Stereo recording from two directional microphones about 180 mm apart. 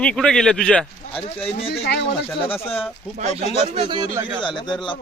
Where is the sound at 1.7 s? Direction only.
70° left (ahead or behind).